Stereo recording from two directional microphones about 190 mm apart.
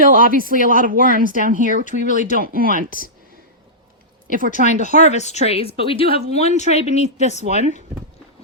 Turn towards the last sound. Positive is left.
turn(degrees=35)  # may be behind; listen again after turning